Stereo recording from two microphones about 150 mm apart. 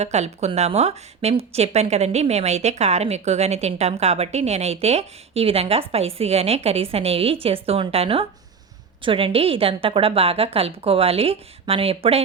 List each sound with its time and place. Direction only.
0.0 s a woman's voice: 50° right (ahead or behind)